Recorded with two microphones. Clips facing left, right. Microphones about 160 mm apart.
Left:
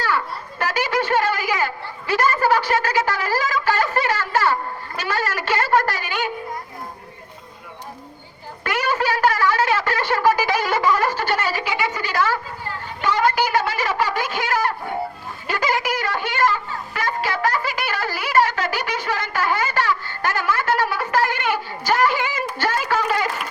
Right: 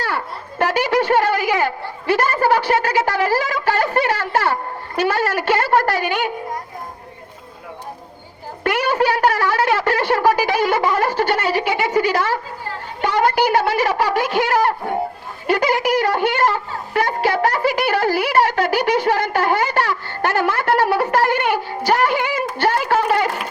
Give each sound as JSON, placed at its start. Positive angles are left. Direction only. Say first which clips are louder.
{"t": 0.6, "sound": "speech", "louder": "right 5 dB", "side_deg": -60}
{"t": 8.6, "sound": "speech", "louder": "right 4 dB", "side_deg": -60}
{"t": 13.0, "sound": "speech", "louder": "right 3 dB", "side_deg": -60}